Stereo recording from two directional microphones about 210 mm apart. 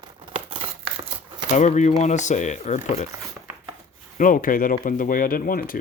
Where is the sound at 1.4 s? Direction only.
35° left (ahead or behind).